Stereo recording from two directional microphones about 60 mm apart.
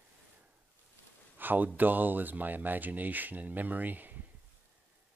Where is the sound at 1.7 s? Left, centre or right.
Right.